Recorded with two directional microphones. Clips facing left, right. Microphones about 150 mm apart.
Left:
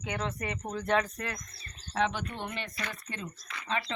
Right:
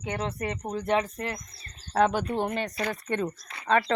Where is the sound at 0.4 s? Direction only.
20° right (ahead or behind).